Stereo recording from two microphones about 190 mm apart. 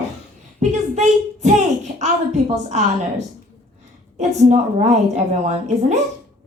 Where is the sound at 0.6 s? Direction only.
35° right (ahead or behind).